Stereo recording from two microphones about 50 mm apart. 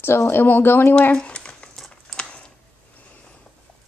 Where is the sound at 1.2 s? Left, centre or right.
Centre.